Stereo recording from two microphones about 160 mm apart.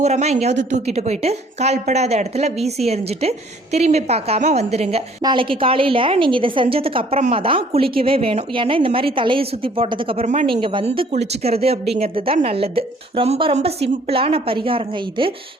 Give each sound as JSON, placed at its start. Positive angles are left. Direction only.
{"t": 0.0, "sound": "a woman's voice", "side_deg": -45}
{"t": 10.4, "sound": "a woman's voice", "side_deg": -30}